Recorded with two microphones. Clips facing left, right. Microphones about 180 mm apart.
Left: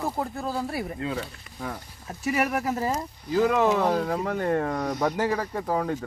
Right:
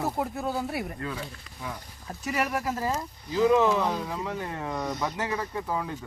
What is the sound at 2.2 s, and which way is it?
Speech, 10° left (ahead or behind).